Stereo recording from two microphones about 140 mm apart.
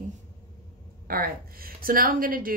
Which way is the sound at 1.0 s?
90° right.